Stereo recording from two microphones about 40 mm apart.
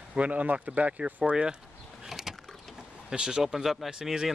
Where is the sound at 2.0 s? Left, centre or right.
Centre.